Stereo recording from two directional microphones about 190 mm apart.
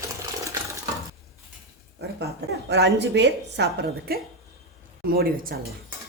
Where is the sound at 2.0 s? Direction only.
65° right (ahead or behind).